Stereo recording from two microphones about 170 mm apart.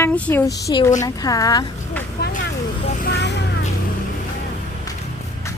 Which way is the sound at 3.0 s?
90° left.